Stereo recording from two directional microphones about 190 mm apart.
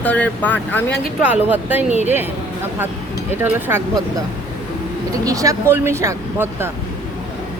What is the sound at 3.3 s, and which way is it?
Speech, 10° right (ahead or behind).